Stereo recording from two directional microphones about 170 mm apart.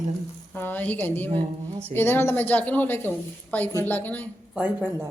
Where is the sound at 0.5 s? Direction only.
10° left (ahead or behind).